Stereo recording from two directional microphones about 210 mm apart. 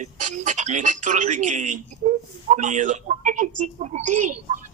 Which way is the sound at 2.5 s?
35° right (ahead or behind).